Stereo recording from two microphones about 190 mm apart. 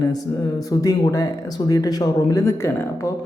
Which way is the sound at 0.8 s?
15° left (ahead or behind).